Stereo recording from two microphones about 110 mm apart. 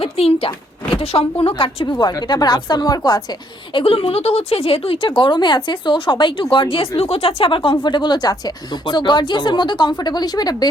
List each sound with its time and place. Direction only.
0.0 s speech: 60° left (ahead or behind)
1.9 s speech: 35° left (ahead or behind)
3.8 s speech: 60° left (ahead or behind); by 10.7 s 35° left (ahead or behind)